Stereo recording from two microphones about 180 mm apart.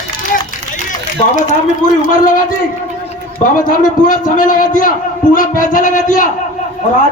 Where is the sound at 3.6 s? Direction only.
50° left (ahead or behind).